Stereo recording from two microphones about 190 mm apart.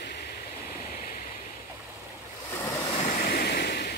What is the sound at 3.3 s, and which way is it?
Waves, 55° left (ahead or behind).